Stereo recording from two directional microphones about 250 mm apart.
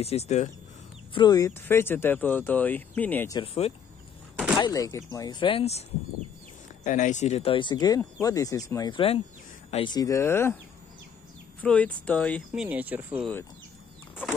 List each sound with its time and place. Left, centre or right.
0.0 s speech: left
1.1 s speech: centre
4.6 s speech: centre
11.6 s speech: centre
12.6 s speech: centre